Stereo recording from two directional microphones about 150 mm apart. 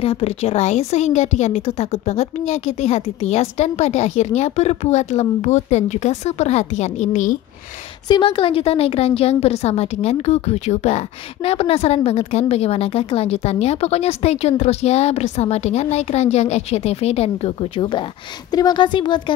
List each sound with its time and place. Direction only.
0.0 s a woman's voice: 40° left (ahead or behind)
8.1 s a woman's voice: 35° left (ahead or behind)